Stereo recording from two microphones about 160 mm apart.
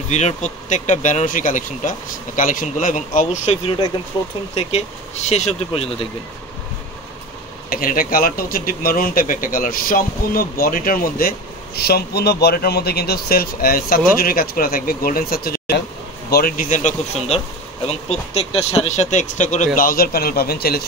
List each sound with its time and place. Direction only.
0.1 s speech: 45° left (ahead or behind)
4.1 s speech: 25° left (ahead or behind)
4.6 s speech: 40° left (ahead or behind)
7.7 s speech: 60° left (ahead or behind)